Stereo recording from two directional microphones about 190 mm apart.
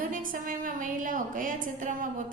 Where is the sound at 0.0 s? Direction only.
45° right (ahead or behind).